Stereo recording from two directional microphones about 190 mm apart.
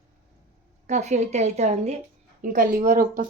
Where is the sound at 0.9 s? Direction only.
35° right (ahead or behind).